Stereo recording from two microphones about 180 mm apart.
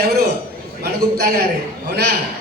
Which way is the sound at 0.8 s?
60° right (ahead or behind).